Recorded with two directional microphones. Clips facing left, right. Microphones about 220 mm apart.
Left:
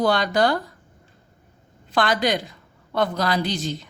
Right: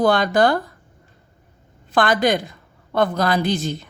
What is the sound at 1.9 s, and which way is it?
A woman's voice, 50° right (ahead or behind).